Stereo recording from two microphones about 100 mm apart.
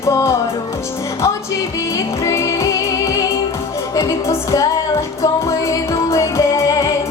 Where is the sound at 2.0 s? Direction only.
30° left (ahead or behind).